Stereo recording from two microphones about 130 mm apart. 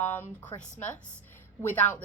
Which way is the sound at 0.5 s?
35° left (ahead or behind).